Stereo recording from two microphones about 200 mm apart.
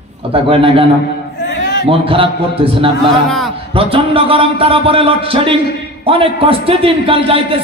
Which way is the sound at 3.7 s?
25° right (ahead or behind).